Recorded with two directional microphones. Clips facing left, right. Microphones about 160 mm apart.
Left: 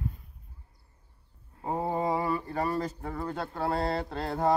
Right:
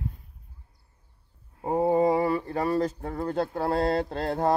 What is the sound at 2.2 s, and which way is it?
Speech, 40° right (ahead or behind).